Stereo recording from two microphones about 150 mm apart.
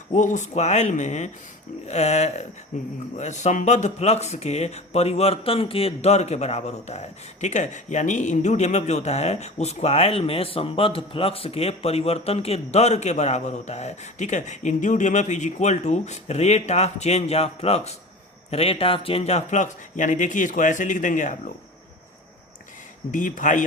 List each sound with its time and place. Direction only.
0.1 s speech: 55° left (ahead or behind)
23.1 s speech: 55° left (ahead or behind)